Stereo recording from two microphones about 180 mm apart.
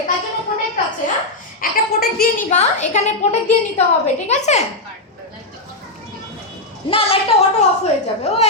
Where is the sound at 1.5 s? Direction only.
55° left (ahead or behind).